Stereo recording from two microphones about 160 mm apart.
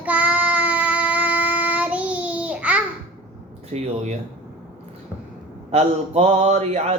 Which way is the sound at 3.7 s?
45° right (ahead or behind).